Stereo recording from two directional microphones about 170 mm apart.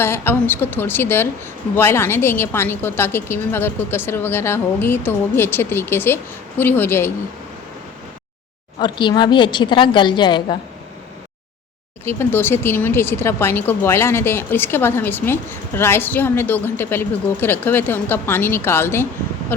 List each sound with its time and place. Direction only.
0.0 s speech: 15° left (ahead or behind)
8.8 s a woman's voice: 25° left (ahead or behind)
12.0 s speech: 15° left (ahead or behind)